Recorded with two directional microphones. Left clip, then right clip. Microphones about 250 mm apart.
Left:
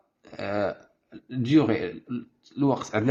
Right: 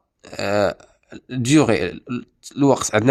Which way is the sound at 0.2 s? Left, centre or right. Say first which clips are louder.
Right 9 dB; right.